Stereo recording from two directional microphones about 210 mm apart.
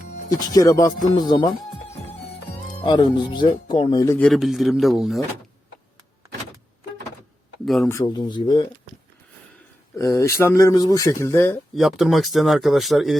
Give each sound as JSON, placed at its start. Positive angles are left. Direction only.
{"t": 0.3, "sound": "speech", "side_deg": 15}
{"t": 2.8, "sound": "speech", "side_deg": 20}
{"t": 4.3, "sound": "a man's voice", "side_deg": 0}
{"t": 7.6, "sound": "speech", "side_deg": 0}
{"t": 7.9, "sound": "speech", "side_deg": 15}
{"t": 10.0, "sound": "speech", "side_deg": 15}